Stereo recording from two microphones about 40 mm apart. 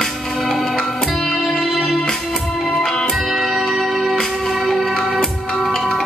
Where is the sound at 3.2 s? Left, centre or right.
Centre.